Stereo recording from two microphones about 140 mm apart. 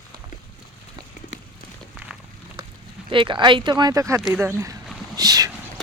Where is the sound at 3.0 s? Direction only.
35° right (ahead or behind).